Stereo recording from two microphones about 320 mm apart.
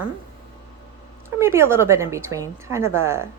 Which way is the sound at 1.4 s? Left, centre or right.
Centre.